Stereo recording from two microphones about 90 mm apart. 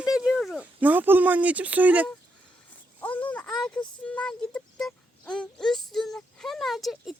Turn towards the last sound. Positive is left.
turn(degrees=0)  # may be behind; listen again after turning